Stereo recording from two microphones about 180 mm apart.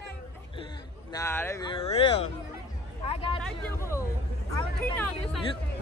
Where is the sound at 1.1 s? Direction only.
15° left (ahead or behind).